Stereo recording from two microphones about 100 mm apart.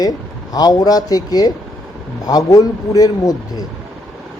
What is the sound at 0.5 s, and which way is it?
Speech, 40° left (ahead or behind).